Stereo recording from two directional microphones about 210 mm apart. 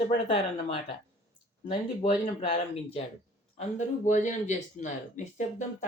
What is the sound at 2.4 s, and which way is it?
A man's voice, 30° left (ahead or behind).